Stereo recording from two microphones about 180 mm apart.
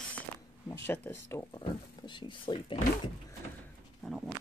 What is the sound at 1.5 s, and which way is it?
Speech, 25° left (ahead or behind).